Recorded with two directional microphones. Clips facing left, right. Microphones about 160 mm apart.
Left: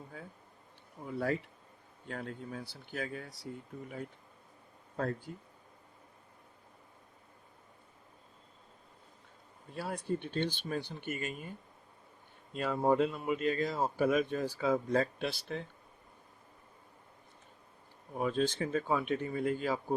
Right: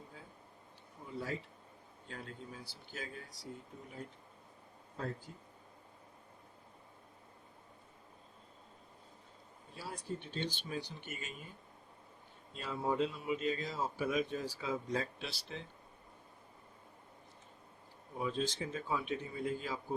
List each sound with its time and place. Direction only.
0.1 s a sound: 60° left (ahead or behind)
1.0 s speech: 60° left (ahead or behind)
9.7 s speech: 60° left (ahead or behind)
12.5 s speech: 55° left (ahead or behind)
18.2 s speech: 60° left (ahead or behind)